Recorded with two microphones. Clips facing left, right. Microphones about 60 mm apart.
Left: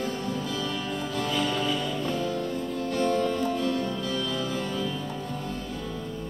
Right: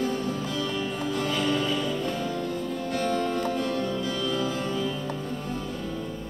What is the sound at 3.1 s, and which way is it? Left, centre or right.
Music, right.